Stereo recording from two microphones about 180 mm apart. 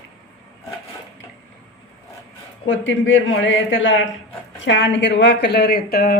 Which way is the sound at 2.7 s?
90° left.